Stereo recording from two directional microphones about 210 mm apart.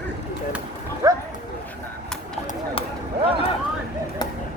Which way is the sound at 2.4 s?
25° left (ahead or behind).